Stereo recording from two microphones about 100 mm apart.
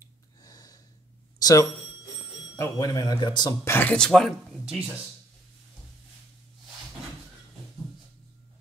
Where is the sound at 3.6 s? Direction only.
25° left (ahead or behind).